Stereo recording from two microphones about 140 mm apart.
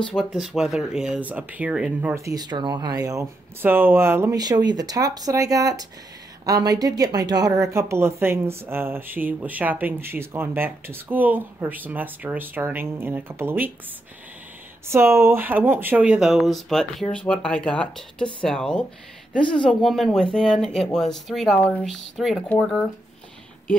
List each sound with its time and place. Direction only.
0.0 s speech: 5° left (ahead or behind)
2.1 s speech: 25° right (ahead or behind)
14.9 s speech: 20° right (ahead or behind); by 21.8 s 10° left (ahead or behind)
21.8 s speech: centre (ahead or behind)